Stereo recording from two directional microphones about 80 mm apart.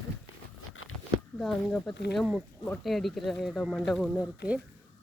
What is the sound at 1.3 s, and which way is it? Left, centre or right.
Speech, centre.